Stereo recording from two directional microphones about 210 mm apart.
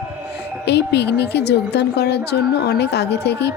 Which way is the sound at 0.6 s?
55° left (ahead or behind).